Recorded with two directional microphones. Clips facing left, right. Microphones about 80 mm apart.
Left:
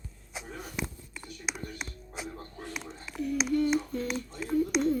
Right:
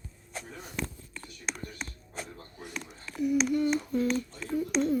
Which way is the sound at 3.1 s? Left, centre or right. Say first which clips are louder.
Right 4 dB; centre.